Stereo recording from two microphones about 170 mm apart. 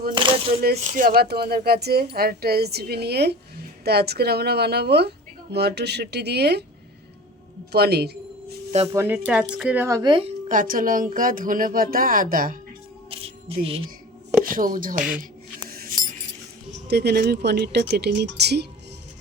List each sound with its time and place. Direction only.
0.1 s speech: 30° right (ahead or behind)
0.6 s speech: 60° right (ahead or behind)
7.7 s speech: 70° right (ahead or behind)
8.9 s speech: 15° right (ahead or behind)
10.5 s speech: 55° right (ahead or behind)
13.1 s speech: 35° right (ahead or behind)
14.5 s speech: 55° right (ahead or behind)
15.7 s a sound: 55° right (ahead or behind)
16.9 s speech: 75° right (ahead or behind)